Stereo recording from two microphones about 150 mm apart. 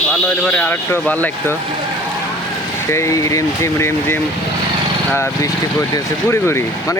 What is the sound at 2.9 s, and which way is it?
Speech, 20° left (ahead or behind).